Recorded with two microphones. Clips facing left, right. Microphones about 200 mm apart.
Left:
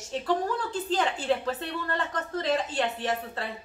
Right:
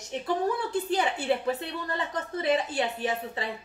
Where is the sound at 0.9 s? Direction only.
10° right (ahead or behind).